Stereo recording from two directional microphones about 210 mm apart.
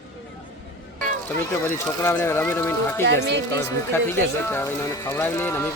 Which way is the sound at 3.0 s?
55° right (ahead or behind).